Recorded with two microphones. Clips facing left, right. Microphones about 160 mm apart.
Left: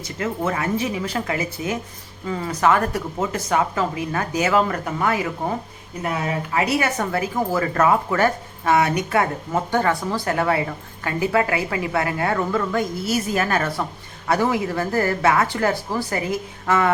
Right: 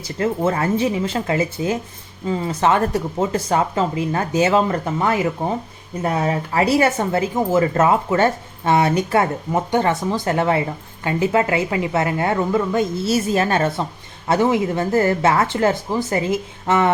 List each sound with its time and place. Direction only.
0.0 s speech: 30° right (ahead or behind)